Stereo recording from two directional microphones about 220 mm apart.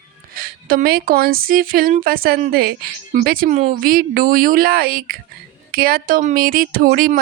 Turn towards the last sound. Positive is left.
turn(degrees=-40)  # may be behind; listen again after turning